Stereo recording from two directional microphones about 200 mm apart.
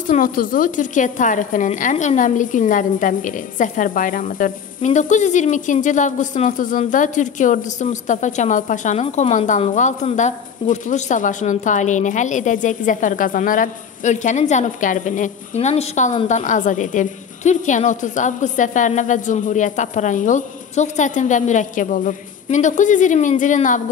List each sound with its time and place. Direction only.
0.1 s a woman's voice: 45° left (ahead or behind)